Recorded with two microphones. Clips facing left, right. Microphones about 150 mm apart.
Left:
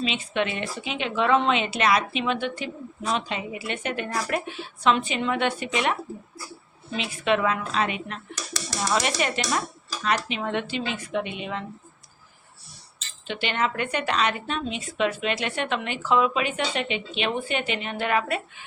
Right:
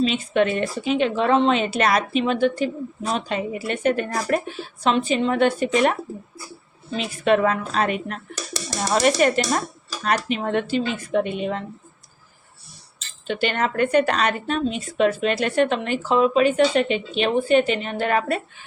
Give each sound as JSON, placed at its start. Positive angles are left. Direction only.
{"t": 0.0, "sound": "speech", "side_deg": -45}
{"t": 13.0, "sound": "speech", "side_deg": -45}